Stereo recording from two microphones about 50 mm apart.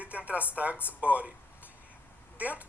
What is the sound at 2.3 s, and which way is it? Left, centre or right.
Speech, right.